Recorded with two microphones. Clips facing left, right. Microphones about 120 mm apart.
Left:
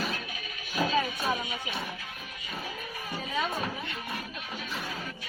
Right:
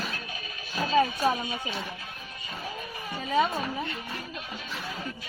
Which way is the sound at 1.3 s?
30° right (ahead or behind).